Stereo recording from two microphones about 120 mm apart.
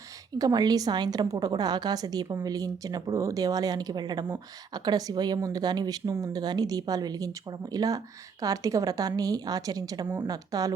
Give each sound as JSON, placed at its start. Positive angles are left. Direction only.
{"t": 0.3, "sound": "a woman's voice", "side_deg": -35}